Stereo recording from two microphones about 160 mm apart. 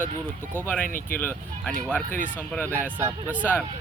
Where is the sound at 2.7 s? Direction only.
15° right (ahead or behind).